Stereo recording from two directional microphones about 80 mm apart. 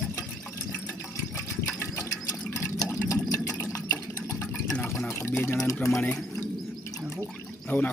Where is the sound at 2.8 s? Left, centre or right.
Left.